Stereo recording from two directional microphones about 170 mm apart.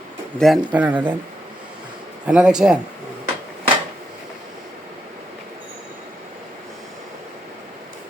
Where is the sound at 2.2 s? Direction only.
5° right (ahead or behind).